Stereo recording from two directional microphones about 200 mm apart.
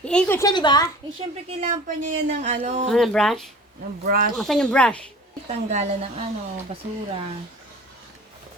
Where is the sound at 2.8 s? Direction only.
Centre (ahead or behind).